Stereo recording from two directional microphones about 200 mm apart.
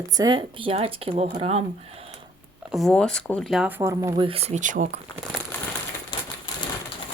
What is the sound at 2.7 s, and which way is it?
Speech, centre (ahead or behind).